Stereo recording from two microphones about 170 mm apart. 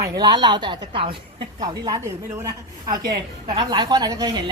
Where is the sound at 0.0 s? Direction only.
25° right (ahead or behind).